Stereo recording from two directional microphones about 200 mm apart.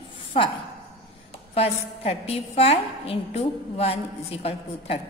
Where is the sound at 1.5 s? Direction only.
30° left (ahead or behind).